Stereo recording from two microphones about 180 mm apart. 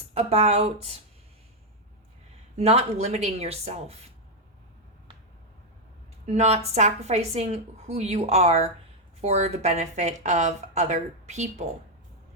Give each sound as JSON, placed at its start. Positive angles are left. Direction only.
{"t": 0.1, "sound": "speech", "side_deg": -35}
{"t": 2.6, "sound": "speech", "side_deg": -35}
{"t": 6.3, "sound": "speech", "side_deg": -35}